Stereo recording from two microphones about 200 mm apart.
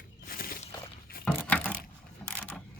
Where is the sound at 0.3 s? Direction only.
45° left (ahead or behind).